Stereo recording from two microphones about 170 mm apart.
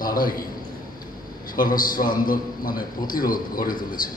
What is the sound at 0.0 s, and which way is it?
Speech, 55° left (ahead or behind).